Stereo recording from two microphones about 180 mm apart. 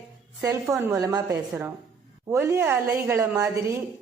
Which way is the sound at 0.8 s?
20° right (ahead or behind).